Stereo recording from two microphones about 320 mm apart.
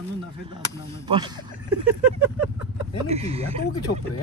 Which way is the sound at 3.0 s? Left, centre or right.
Centre.